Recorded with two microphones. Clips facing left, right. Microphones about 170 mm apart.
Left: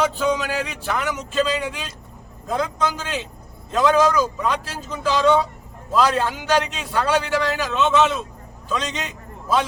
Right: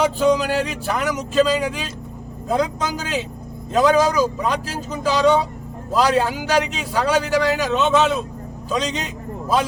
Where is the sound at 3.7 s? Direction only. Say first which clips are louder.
Right 1 dB; 40° right (ahead or behind).